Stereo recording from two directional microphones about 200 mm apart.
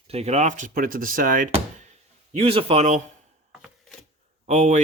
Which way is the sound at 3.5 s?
Centre (ahead or behind).